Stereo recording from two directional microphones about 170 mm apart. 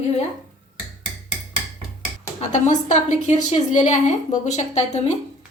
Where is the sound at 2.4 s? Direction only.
45° left (ahead or behind).